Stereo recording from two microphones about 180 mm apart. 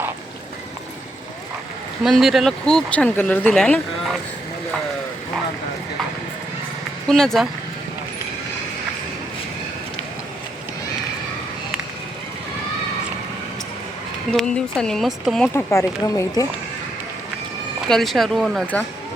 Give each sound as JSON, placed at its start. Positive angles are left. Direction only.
{"t": 2.0, "sound": "speech", "side_deg": 0}
{"t": 7.1, "sound": "speech", "side_deg": 0}
{"t": 14.3, "sound": "speech", "side_deg": 5}
{"t": 15.5, "sound": "speech", "side_deg": 15}
{"t": 17.8, "sound": "speech", "side_deg": 0}